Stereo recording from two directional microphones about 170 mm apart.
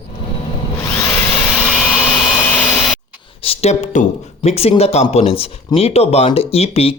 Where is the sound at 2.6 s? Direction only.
Centre (ahead or behind).